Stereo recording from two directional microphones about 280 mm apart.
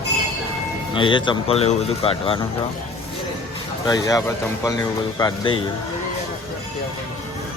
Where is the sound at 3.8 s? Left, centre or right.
Centre.